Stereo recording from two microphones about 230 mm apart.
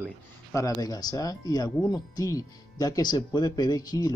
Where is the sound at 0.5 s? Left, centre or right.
Centre.